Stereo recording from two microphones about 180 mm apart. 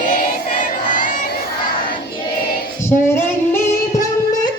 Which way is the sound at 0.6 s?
45° left (ahead or behind).